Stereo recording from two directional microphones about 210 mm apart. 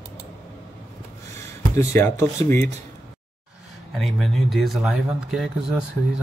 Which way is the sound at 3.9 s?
Centre (ahead or behind).